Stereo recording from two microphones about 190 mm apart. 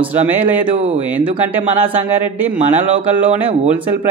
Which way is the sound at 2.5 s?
35° right (ahead or behind).